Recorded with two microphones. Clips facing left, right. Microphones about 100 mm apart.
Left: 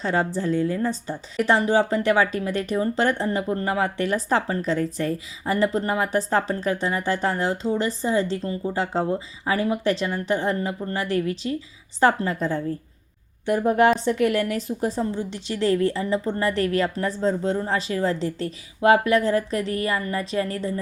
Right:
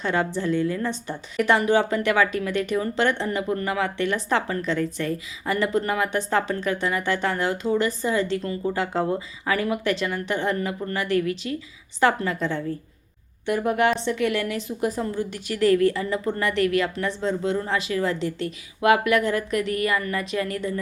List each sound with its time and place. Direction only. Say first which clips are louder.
0.0 s a woman's voice: left 1 dB; 35° left (ahead or behind)